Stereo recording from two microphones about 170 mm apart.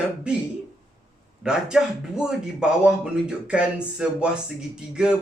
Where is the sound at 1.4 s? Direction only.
5° right (ahead or behind).